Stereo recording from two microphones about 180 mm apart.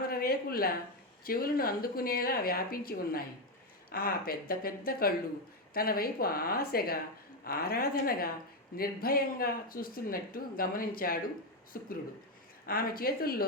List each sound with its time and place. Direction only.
0.1 s speech: 55° left (ahead or behind)